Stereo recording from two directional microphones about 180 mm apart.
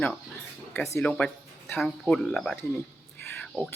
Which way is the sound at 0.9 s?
5° left (ahead or behind).